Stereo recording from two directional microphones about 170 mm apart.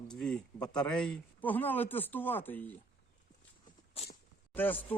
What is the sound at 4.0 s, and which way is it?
Speech, 35° left (ahead or behind).